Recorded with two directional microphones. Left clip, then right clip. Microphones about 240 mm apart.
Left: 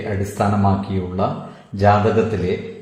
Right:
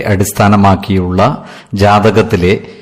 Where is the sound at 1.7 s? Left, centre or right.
Right.